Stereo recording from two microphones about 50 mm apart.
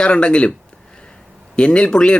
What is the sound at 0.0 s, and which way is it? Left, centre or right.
Speech, left.